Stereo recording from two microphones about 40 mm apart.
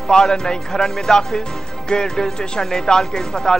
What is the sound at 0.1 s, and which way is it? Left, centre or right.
A man's voice, centre.